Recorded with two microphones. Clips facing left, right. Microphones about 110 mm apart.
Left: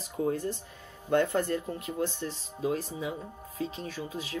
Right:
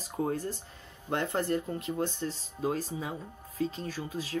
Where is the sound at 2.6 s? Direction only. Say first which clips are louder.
Left 1 dB; 45° right (ahead or behind).